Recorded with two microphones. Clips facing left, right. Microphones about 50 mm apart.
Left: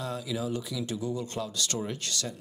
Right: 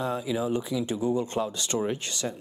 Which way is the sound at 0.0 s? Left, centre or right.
Right.